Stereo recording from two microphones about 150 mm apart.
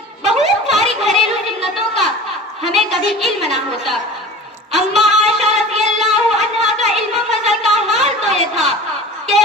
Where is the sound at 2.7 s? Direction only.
Centre (ahead or behind).